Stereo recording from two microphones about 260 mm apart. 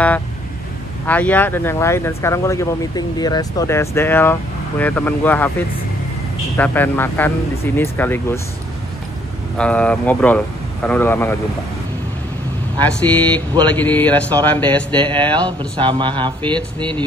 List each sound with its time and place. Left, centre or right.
1.0 s speech: centre
6.5 s speech: centre
9.6 s a man's voice: centre
12.8 s a man's voice: centre
15.0 s a man's voice: centre